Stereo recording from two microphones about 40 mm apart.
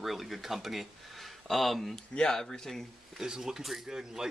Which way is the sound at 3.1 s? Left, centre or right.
Centre.